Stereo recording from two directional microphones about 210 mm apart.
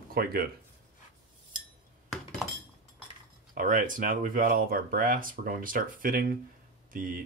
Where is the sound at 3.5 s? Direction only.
40° right (ahead or behind).